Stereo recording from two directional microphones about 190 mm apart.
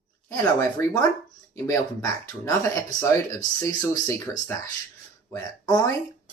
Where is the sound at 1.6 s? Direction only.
20° left (ahead or behind).